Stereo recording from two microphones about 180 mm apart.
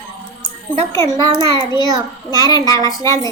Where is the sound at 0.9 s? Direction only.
20° left (ahead or behind).